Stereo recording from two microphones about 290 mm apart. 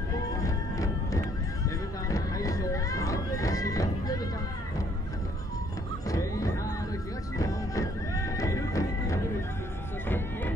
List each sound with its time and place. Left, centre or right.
2.0 s music: centre
6.0 s music: centre
10.0 s vehicle: centre